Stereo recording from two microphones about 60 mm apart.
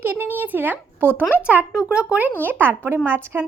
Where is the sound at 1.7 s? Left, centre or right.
Centre.